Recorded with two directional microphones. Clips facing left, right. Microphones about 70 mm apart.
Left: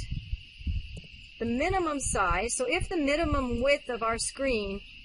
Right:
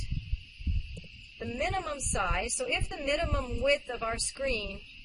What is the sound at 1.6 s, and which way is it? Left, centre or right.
A woman's voice, left.